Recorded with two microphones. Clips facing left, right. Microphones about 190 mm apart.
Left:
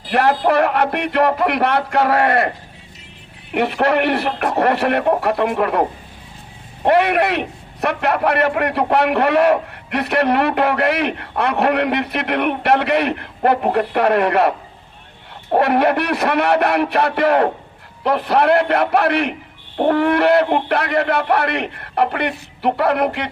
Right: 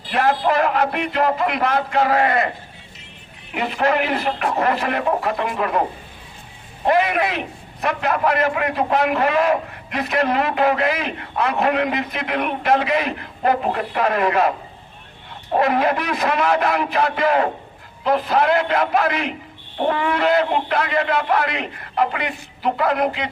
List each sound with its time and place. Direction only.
0.1 s a man's voice: 65° left (ahead or behind)
3.5 s a man's voice: 65° left (ahead or behind)
6.8 s a man's voice: 65° left (ahead or behind)
15.5 s a man's voice: 65° left (ahead or behind)
19.7 s a man's voice: 55° left (ahead or behind)